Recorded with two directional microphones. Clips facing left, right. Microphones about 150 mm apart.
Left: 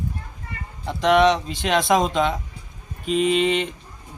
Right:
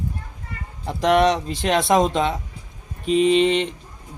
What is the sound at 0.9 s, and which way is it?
Speech, 35° right (ahead or behind).